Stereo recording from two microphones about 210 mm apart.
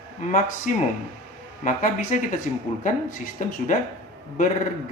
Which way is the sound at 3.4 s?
35° left (ahead or behind).